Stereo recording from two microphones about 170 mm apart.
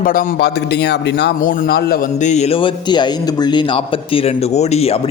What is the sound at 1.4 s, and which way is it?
Speech, 55° left (ahead or behind).